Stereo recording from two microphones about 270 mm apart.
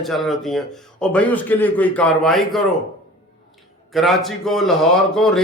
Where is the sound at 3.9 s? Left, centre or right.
Centre.